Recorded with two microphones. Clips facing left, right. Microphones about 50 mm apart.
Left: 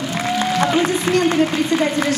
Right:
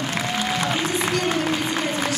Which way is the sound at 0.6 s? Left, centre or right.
Left.